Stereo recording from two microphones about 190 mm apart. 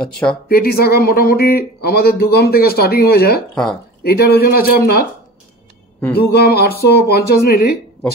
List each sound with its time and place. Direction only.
0.0 s speech: 5° left (ahead or behind)
0.5 s speech: 55° left (ahead or behind)
6.1 s speech: 55° left (ahead or behind)